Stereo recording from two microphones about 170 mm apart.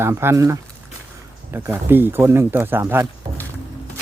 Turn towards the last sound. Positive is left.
turn(degrees=-15)  # may be behind; listen again after turning